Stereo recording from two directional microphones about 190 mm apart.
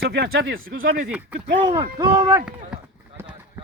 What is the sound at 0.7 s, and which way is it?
Speech, 45° right (ahead or behind).